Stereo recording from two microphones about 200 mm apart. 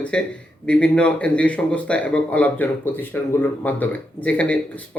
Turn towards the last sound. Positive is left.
turn(degrees=5)  # may be behind; listen again after turning